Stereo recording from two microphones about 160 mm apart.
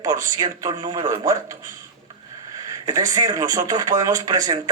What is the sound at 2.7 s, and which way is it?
A man's voice, 25° right (ahead or behind).